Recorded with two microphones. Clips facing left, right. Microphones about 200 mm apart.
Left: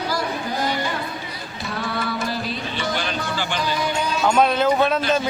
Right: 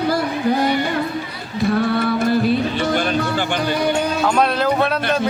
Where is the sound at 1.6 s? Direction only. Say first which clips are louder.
Right 10 dB; 55° right (ahead or behind).